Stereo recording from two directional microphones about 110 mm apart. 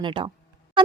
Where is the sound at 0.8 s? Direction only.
50° right (ahead or behind).